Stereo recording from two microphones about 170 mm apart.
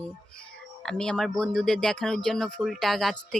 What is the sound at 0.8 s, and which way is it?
A woman's voice, 5° left (ahead or behind).